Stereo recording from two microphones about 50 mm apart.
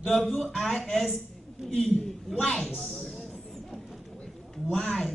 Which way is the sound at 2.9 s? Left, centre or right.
Left.